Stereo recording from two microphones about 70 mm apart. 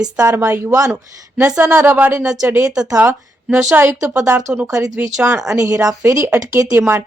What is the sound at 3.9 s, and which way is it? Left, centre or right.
Speech, right.